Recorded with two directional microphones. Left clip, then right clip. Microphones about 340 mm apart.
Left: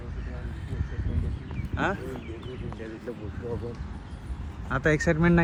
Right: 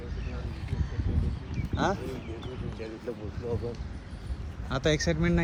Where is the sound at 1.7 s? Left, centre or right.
Centre.